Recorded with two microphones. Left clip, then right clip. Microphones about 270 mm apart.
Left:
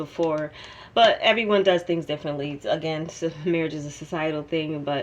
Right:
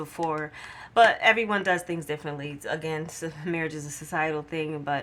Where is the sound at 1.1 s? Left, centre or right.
Right.